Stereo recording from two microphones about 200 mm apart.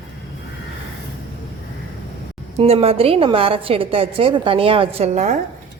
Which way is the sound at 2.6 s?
30° right (ahead or behind).